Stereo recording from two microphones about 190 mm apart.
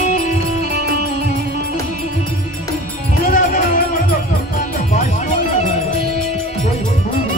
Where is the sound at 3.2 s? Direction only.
45° left (ahead or behind).